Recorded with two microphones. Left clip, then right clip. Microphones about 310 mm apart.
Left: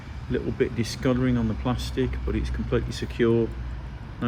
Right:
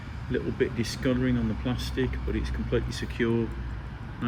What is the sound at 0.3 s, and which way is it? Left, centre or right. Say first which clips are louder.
Speech: left 2 dB; centre.